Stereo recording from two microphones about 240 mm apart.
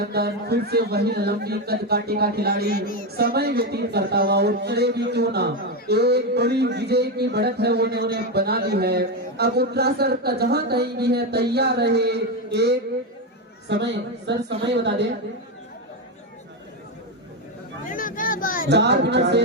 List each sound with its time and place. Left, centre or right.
0.0 s a man's voice: right
2.8 s speech: left
3.2 s speech: right
17.8 s speech: left
18.7 s speech: right